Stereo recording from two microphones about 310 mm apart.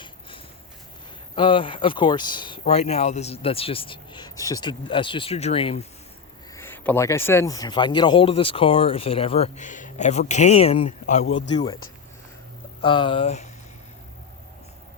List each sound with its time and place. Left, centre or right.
1.4 s speech: centre
6.5 s speech: centre; by 11.3 s left
11.3 s speech: left
11.5 s speech: centre
12.8 s speech: centre